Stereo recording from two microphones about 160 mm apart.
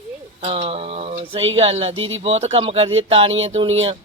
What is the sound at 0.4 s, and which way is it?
Speech, 35° right (ahead or behind).